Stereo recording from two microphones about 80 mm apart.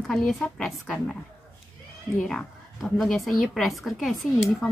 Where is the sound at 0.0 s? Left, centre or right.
Centre.